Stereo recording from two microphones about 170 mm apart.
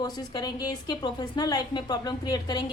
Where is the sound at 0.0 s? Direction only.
25° left (ahead or behind).